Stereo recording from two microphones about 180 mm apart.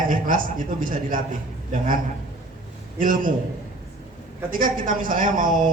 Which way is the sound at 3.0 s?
50° right (ahead or behind).